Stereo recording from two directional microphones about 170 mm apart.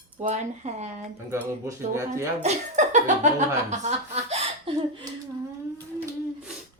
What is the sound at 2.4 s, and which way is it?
Speech, 40° right (ahead or behind).